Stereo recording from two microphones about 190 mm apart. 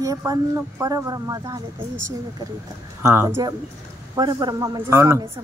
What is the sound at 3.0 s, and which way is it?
A woman's voice, 15° right (ahead or behind).